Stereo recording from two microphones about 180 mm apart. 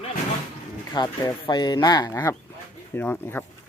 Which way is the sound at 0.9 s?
20° left (ahead or behind).